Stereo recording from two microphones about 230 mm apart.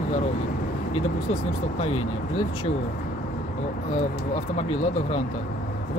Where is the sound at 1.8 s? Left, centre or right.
Left.